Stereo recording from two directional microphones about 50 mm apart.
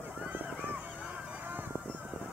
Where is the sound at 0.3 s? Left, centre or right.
Right.